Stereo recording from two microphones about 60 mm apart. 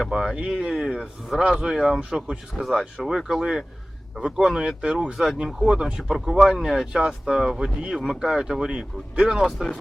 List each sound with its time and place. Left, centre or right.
0.1 s speech: centre
2.6 s speech: centre
5.5 s speech: centre